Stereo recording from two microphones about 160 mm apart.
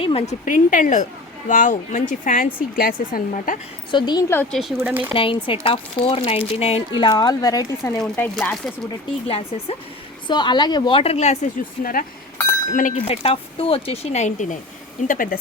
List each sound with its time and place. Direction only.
0.0 s speech: 40° left (ahead or behind)
0.4 s speech: 55° left (ahead or behind)
3.9 s speech: 30° left (ahead or behind)
4.8 s speech: 10° right (ahead or behind)
5.1 s speech: 35° left (ahead or behind)
6.9 s speech: 25° left (ahead or behind); by 8.7 s 10° left (ahead or behind)
9.2 s speech: 35° left (ahead or behind)
11.8 s speech: 60° left (ahead or behind)
13.1 s speech: 35° left (ahead or behind); by 15.4 s 55° left (ahead or behind)